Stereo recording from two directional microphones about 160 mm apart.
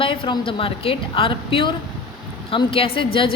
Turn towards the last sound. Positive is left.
turn(degrees=35)  # may be behind; listen again after turning